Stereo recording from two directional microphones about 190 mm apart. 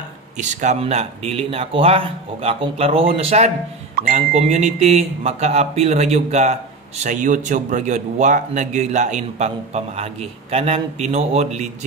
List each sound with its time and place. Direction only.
0.4 s speech: 40° right (ahead or behind)